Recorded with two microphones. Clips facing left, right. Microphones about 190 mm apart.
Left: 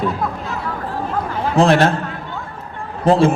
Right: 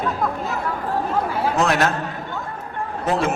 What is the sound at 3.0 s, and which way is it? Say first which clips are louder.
Speech: left 9 dB; 30° left (ahead or behind).